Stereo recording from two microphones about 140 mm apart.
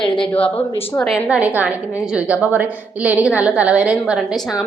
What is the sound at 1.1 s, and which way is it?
A woman's voice, 10° right (ahead or behind).